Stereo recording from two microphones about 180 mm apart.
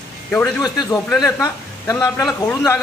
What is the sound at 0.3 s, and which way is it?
A man's voice, 15° left (ahead or behind).